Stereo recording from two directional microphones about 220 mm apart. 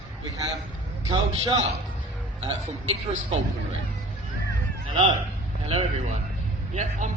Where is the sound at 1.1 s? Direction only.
25° right (ahead or behind).